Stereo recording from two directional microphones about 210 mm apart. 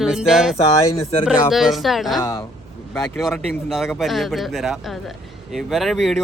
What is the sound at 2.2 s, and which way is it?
Speech, 15° left (ahead or behind).